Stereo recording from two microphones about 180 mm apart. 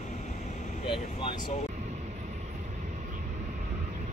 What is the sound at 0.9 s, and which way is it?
Vehicle, 30° left (ahead or behind).